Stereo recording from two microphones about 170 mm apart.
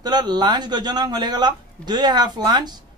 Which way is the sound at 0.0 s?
25° right (ahead or behind).